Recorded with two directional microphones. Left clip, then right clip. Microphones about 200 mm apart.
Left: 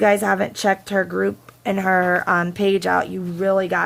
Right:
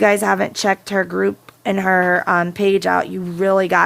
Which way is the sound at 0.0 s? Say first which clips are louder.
Right 2 dB; 20° right (ahead or behind).